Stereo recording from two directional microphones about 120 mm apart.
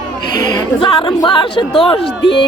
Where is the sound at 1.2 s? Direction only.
45° left (ahead or behind).